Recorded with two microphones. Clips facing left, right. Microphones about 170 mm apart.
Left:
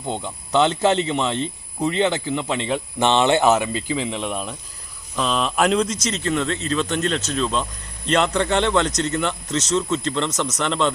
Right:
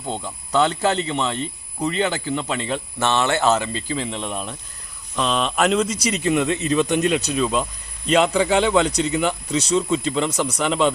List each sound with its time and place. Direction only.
0.1 s a man's voice: 20° left (ahead or behind); by 10.9 s 5° right (ahead or behind)